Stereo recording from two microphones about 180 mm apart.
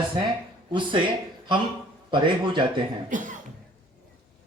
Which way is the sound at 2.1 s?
25° right (ahead or behind).